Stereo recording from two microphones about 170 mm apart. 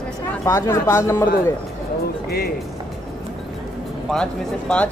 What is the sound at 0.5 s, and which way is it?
Speech, 15° left (ahead or behind).